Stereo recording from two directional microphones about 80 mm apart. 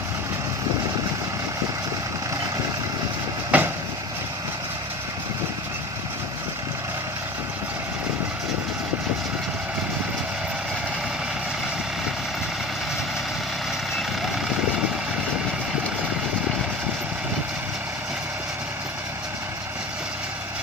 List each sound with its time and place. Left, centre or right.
3.5 s vehicle: centre